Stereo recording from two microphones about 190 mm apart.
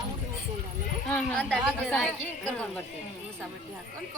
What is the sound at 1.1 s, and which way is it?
A woman's voice, 10° left (ahead or behind).